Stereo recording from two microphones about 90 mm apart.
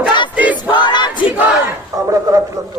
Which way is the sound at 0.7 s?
55° left (ahead or behind).